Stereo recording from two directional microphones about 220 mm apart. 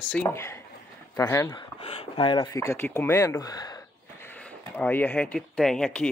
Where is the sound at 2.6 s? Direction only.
10° left (ahead or behind).